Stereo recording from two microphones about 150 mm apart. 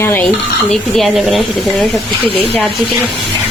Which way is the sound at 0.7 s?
Centre (ahead or behind).